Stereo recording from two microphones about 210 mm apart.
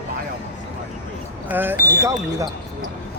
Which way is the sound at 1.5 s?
10° right (ahead or behind).